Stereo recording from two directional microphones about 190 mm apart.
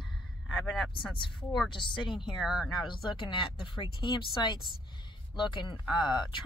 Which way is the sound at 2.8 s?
25° left (ahead or behind).